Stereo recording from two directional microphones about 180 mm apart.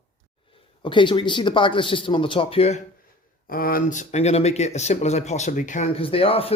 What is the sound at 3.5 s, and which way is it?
Speech, 55° left (ahead or behind).